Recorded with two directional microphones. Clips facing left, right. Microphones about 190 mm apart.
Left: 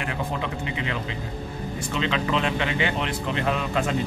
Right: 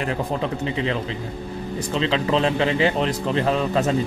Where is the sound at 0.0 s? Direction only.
35° right (ahead or behind).